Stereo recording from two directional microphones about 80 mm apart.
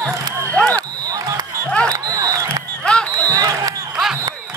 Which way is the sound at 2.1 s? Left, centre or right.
Right.